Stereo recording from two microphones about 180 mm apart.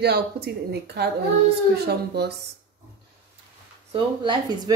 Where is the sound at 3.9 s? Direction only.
25° right (ahead or behind).